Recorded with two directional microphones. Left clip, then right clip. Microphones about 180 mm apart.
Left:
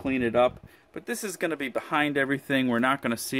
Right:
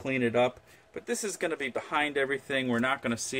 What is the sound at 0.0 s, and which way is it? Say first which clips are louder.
Speech: left 3 dB; 40° left (ahead or behind).